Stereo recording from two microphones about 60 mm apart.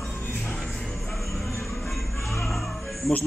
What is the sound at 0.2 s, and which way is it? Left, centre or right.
Music, left.